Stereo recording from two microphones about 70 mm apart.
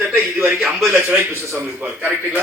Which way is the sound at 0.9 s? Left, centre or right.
Right.